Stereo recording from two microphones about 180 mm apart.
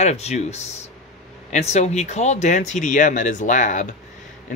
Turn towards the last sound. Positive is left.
turn(degrees=45)  # may be behind; listen again after turning